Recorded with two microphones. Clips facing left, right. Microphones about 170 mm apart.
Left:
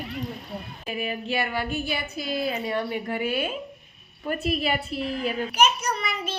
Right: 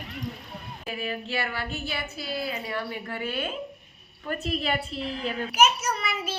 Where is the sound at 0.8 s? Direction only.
20° left (ahead or behind).